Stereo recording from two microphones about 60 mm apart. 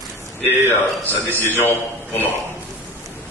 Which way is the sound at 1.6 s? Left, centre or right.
Left.